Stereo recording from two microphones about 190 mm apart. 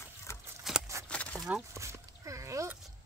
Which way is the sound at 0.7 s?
Centre (ahead or behind).